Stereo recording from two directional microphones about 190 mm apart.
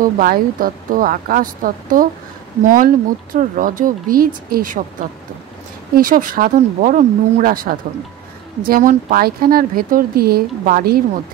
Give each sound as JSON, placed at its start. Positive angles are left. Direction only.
{"t": 0.0, "sound": "speech", "side_deg": -50}
{"t": 5.9, "sound": "speech", "side_deg": -45}